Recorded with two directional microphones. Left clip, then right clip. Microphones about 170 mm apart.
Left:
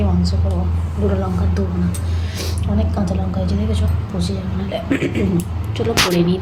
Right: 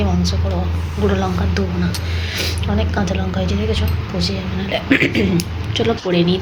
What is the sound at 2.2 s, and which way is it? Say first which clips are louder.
Speech: right 6 dB; centre (ahead or behind).